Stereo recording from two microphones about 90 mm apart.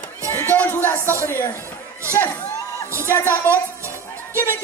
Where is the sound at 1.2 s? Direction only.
30° left (ahead or behind).